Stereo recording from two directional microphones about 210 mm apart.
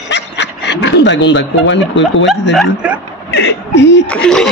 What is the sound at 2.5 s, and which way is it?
Speech, 5° right (ahead or behind).